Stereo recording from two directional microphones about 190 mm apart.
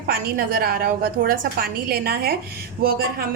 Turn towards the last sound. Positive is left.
turn(degrees=-50)  # may be behind; listen again after turning